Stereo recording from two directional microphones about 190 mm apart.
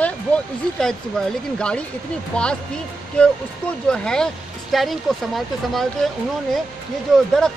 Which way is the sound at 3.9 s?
5° left (ahead or behind).